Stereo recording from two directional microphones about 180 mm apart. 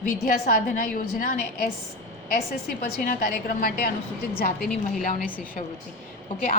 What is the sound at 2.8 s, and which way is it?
A woman's voice, 55° left (ahead or behind).